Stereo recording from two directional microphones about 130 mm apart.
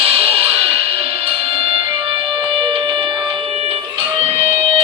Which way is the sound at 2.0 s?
40° right (ahead or behind).